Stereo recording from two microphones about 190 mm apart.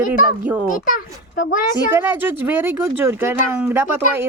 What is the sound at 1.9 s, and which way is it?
Speech, 10° right (ahead or behind).